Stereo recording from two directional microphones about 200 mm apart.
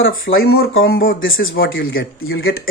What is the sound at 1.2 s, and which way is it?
Speech, 75° left (ahead or behind).